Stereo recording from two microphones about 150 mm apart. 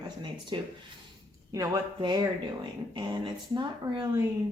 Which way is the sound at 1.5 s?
25° right (ahead or behind).